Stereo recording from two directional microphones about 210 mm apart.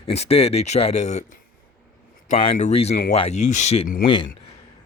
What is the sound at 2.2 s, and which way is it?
Speech, 30° left (ahead or behind).